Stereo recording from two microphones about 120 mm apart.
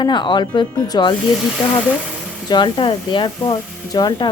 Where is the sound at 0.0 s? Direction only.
40° left (ahead or behind).